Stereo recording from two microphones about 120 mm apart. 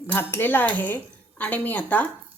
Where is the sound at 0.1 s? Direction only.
20° left (ahead or behind).